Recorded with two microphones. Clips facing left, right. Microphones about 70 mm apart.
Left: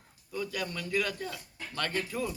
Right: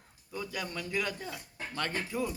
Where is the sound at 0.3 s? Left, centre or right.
Centre.